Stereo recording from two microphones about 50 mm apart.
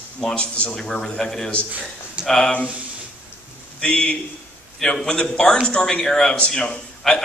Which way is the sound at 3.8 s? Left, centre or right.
Centre.